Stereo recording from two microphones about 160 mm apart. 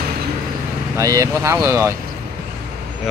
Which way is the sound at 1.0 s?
20° right (ahead or behind).